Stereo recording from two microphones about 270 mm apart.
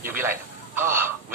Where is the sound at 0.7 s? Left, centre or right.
Centre.